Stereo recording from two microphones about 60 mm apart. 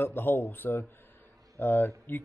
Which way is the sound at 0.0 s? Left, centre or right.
Left.